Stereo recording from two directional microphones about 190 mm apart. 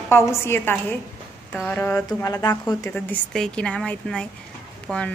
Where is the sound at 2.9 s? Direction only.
5° left (ahead or behind).